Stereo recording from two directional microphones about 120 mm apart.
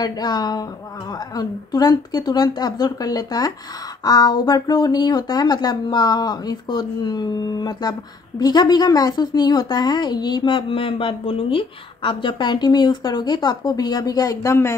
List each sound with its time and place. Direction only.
0.0 s a woman's voice: 35° left (ahead or behind)